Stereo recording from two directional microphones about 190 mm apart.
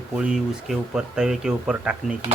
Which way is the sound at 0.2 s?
5° right (ahead or behind).